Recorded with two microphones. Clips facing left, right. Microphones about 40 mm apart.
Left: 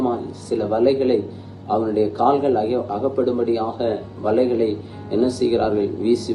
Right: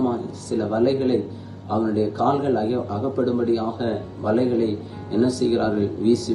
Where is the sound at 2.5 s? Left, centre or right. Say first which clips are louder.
Left 3 dB; left.